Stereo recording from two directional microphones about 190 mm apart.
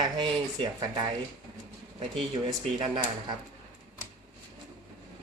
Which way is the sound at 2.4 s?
25° right (ahead or behind).